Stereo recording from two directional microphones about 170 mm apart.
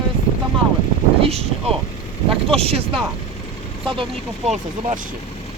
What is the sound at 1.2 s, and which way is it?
Speech, 35° right (ahead or behind).